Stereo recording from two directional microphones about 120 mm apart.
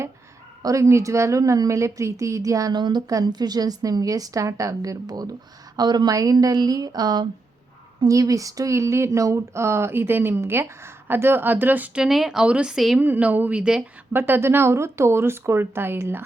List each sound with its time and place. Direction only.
0.6 s a woman's voice: 25° right (ahead or behind)
12.0 s speech: centre (ahead or behind)
13.0 s a woman's voice: 15° right (ahead or behind)